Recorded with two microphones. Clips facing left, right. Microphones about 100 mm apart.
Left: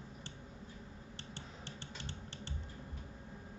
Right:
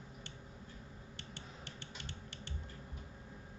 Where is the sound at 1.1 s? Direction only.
30° left (ahead or behind).